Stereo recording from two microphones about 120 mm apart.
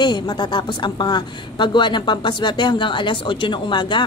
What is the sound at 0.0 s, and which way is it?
A woman's voice, 40° left (ahead or behind).